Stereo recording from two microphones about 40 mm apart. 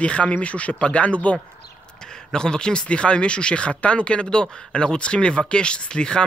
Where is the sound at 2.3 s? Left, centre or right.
Centre.